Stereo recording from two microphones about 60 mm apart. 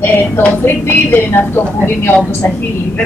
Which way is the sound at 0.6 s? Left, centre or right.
Left.